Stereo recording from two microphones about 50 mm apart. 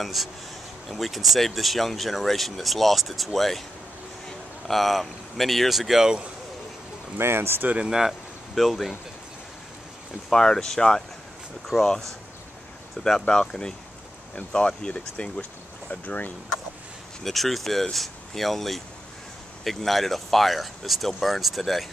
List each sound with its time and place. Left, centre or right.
0.0 s speech: centre
7.2 s speech: right
7.6 s speech: right
7.9 s speech: centre
10.3 s speech: centre
13.0 s speech: left
15.9 s speech: left
17.2 s speech: centre